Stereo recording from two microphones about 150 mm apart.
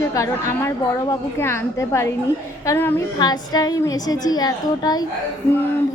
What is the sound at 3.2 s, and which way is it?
A woman's voice, 25° left (ahead or behind).